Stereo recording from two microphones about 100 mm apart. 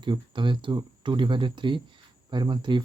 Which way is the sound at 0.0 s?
55° right (ahead or behind).